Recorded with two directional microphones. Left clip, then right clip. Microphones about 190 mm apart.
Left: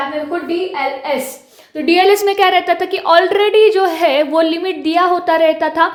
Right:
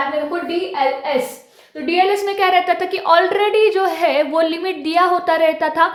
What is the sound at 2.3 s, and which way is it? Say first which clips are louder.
A woman's voice: left 3 dB; 25° left (ahead or behind).